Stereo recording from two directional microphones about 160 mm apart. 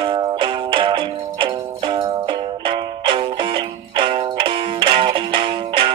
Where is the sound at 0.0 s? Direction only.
30° right (ahead or behind).